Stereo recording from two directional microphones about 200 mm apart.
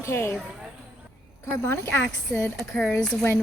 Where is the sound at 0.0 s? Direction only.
15° left (ahead or behind).